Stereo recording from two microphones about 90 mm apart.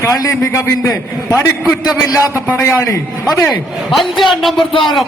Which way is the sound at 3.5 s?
Centre (ahead or behind).